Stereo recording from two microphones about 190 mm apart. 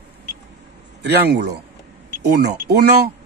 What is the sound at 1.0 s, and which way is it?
Speech, 60° right (ahead or behind).